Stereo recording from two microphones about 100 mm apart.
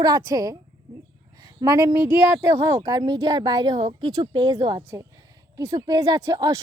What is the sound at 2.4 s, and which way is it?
Speech, 30° right (ahead or behind).